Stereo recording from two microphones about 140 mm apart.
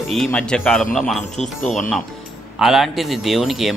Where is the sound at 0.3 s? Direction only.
5° left (ahead or behind).